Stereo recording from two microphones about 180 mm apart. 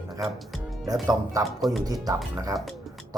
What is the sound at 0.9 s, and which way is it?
Speech, 20° right (ahead or behind).